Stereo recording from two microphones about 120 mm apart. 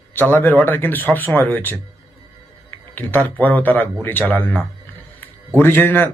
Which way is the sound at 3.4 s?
15° left (ahead or behind).